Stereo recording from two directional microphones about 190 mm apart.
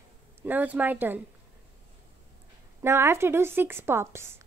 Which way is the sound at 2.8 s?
15° right (ahead or behind).